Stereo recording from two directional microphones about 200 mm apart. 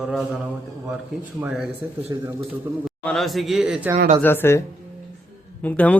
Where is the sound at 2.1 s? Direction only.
15° right (ahead or behind).